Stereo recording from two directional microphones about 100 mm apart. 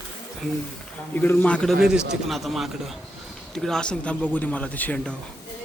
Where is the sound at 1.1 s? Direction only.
20° left (ahead or behind).